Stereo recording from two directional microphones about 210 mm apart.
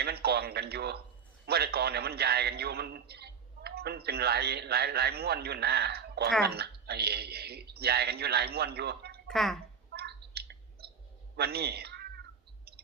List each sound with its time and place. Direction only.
0.0 s a man's voice: 50° right (ahead or behind)
9.2 s speech: centre (ahead or behind)
9.9 s a sound: 50° right (ahead or behind)
11.3 s cat: 50° right (ahead or behind)